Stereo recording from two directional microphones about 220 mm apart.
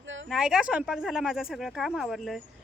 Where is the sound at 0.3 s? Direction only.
Centre (ahead or behind).